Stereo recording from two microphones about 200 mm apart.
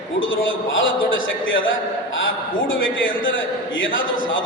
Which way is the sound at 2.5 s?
75° left (ahead or behind).